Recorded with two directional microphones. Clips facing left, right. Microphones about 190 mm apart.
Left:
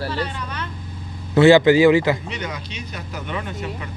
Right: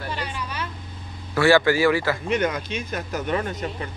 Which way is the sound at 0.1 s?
10° right (ahead or behind).